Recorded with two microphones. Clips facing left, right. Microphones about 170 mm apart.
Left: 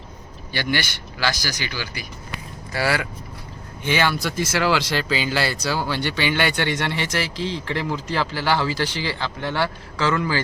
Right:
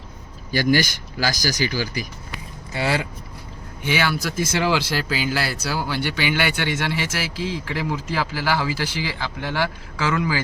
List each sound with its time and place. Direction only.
0.5 s speech: 40° right (ahead or behind)
2.7 s speech: 25° right (ahead or behind)
3.8 s speech: 10° right (ahead or behind)